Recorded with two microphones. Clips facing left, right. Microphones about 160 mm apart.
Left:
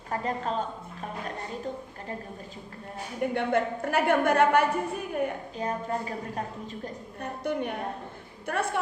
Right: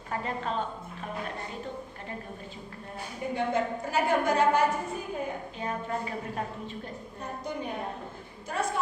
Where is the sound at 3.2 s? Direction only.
65° left (ahead or behind).